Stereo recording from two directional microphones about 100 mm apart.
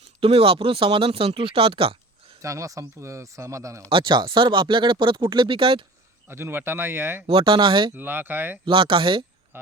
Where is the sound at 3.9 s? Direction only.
55° right (ahead or behind).